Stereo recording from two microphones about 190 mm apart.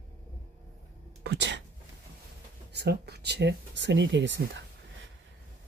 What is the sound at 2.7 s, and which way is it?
Speech, 60° right (ahead or behind).